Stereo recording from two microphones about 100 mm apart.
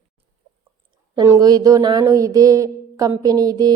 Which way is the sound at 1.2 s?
35° right (ahead or behind).